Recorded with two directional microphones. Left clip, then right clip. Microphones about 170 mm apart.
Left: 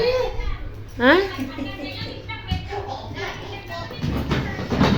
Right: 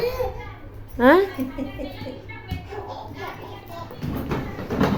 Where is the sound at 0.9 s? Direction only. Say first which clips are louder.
Right 1 dB; 30° right (ahead or behind).